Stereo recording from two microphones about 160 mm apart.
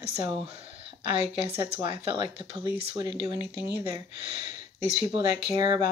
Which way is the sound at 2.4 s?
25° right (ahead or behind).